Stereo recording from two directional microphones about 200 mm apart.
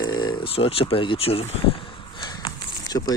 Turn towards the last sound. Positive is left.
turn(degrees=20)  # may be behind; listen again after turning